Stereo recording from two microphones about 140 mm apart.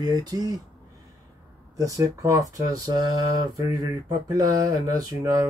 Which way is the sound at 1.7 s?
25° right (ahead or behind).